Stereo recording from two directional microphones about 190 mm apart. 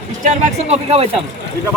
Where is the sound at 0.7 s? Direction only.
30° right (ahead or behind).